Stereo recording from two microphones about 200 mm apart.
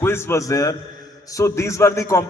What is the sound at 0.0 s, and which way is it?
A man's voice, 10° left (ahead or behind).